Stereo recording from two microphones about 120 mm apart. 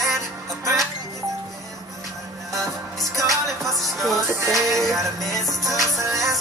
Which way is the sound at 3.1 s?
25° right (ahead or behind).